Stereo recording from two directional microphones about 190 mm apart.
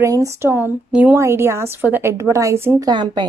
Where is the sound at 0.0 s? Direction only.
15° right (ahead or behind).